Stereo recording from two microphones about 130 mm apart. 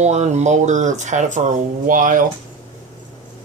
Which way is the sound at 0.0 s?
65° right (ahead or behind).